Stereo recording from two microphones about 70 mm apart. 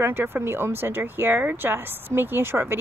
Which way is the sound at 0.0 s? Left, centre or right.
Right.